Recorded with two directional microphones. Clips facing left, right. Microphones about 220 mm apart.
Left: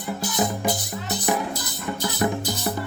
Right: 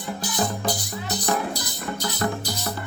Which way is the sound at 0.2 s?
25° left (ahead or behind).